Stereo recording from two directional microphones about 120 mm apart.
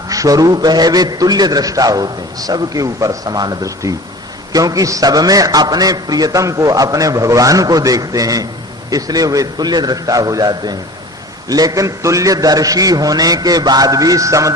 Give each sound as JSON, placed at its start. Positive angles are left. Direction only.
{"t": 0.1, "sound": "a man's voice", "side_deg": -30}